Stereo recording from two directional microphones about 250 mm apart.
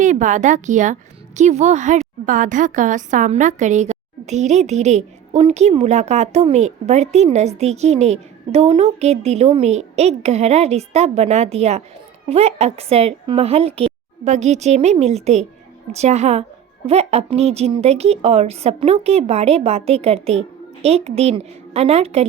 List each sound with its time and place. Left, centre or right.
0.0 s a woman's voice: right